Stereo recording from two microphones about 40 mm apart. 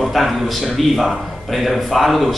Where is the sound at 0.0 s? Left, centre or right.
Centre.